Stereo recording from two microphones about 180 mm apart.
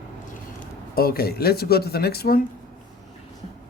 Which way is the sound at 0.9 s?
55° left (ahead or behind).